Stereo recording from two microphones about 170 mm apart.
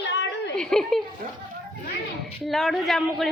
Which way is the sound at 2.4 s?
Centre (ahead or behind).